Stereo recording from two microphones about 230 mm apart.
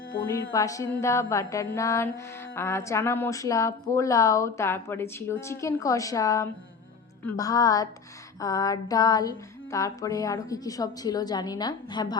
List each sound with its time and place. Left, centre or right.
0.3 s a woman's voice: centre